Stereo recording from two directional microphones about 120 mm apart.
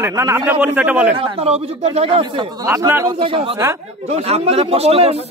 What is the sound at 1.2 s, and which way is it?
A man's voice, 55° right (ahead or behind).